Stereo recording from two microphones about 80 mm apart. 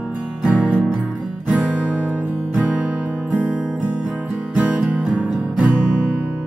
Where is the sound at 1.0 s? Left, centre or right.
Centre.